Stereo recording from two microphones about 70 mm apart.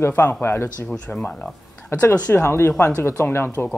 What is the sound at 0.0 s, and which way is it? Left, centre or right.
Speech, left.